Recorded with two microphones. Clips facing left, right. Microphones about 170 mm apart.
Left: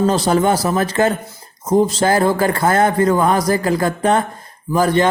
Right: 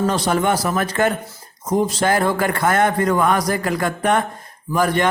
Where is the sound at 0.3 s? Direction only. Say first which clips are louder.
Left 3 dB; 30° left (ahead or behind).